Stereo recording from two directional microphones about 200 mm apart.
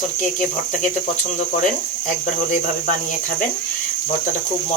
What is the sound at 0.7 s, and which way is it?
Speech, 40° left (ahead or behind).